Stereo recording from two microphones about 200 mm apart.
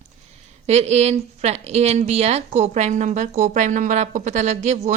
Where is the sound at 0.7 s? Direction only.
35° right (ahead or behind).